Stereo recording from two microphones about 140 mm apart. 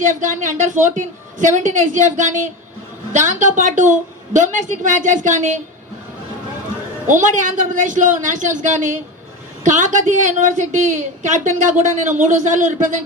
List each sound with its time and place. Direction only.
0.0 s a woman's voice: 65° right (ahead or behind)
7.1 s a woman's voice: 65° right (ahead or behind)